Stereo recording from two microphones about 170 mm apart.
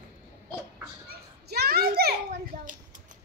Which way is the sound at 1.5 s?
65° right (ahead or behind).